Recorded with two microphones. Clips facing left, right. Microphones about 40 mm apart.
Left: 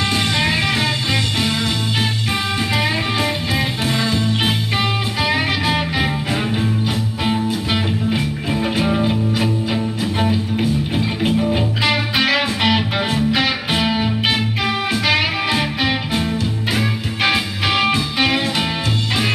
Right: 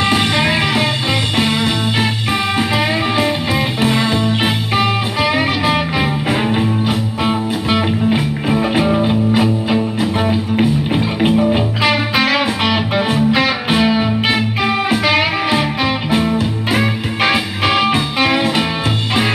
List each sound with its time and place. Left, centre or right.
0.1 s music: right
3.2 s music: centre
5.3 s music: centre
6.4 s music: centre
8.1 s music: right
8.8 s music: centre
10.6 s music: right
11.2 s music: centre
11.8 s music: centre
13.1 s music: centre
16.1 s music: right
17.6 s music: centre